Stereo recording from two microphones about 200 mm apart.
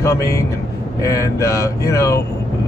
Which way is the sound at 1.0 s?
15° left (ahead or behind).